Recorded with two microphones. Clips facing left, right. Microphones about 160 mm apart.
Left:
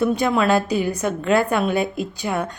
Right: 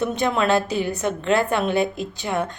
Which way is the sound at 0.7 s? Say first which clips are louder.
Left 2 dB; 40° left (ahead or behind).